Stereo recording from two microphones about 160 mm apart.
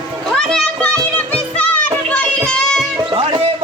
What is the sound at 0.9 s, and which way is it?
Music, 10° left (ahead or behind).